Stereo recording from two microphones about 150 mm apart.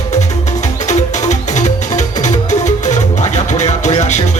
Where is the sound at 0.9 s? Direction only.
50° left (ahead or behind).